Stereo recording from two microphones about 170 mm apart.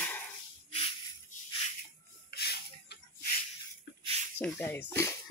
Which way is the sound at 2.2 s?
70° left (ahead or behind).